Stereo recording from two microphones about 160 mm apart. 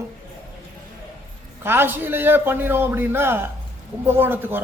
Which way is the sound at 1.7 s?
15° right (ahead or behind).